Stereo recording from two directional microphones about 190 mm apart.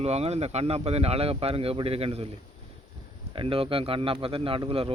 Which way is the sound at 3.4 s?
30° right (ahead or behind).